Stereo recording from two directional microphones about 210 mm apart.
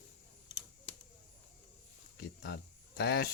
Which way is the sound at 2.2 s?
50° left (ahead or behind).